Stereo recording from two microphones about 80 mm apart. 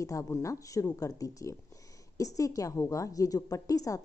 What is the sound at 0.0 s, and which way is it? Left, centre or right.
A woman's voice, left.